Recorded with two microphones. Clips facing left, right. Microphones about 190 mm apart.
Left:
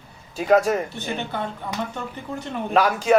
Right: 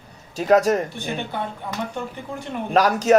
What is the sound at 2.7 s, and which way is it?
Speech, 40° right (ahead or behind).